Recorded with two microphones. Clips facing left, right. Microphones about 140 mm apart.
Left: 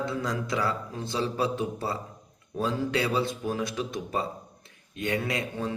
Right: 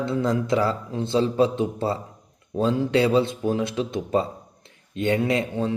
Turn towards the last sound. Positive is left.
turn(degrees=-25)  # may be behind; listen again after turning